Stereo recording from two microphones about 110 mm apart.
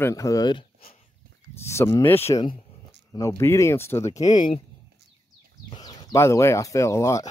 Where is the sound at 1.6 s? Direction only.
25° left (ahead or behind).